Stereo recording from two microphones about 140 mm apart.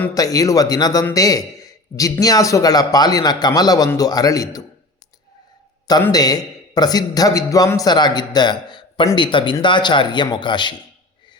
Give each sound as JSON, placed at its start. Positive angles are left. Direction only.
{"t": 0.1, "sound": "a man's voice", "side_deg": 25}
{"t": 5.9, "sound": "a man's voice", "side_deg": 30}